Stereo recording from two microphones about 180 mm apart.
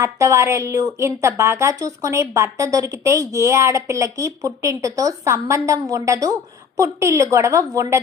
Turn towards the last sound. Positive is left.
turn(degrees=-15)  # may be behind; listen again after turning